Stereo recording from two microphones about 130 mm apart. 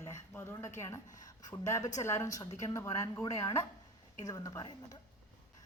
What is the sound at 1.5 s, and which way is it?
Speech, 25° left (ahead or behind).